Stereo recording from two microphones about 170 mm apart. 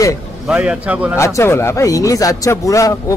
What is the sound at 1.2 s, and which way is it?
A man's voice, 15° left (ahead or behind).